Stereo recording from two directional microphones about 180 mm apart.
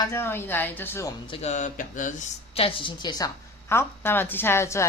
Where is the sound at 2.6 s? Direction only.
30° left (ahead or behind).